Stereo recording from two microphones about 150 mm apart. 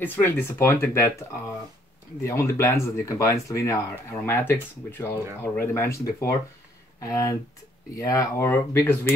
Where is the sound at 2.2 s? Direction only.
20° left (ahead or behind).